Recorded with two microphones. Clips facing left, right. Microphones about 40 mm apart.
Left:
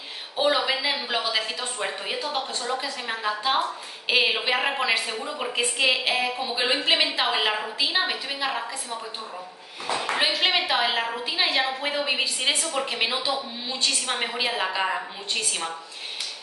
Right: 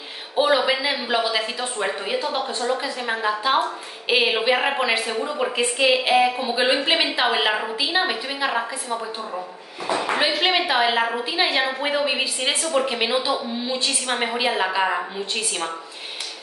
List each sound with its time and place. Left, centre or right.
0.4 s a woman's voice: centre
9.8 s a sound: centre
10.1 s a woman's voice: centre